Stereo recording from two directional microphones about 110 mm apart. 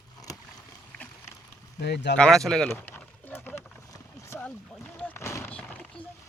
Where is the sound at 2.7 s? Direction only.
20° left (ahead or behind).